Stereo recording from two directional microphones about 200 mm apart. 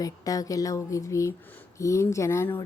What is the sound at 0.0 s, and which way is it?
A woman's voice, 15° left (ahead or behind).